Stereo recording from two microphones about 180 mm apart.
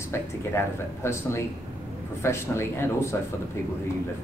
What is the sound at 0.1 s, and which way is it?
Speech, 15° left (ahead or behind).